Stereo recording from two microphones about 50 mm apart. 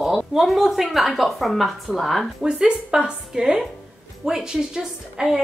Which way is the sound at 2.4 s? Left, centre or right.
Centre.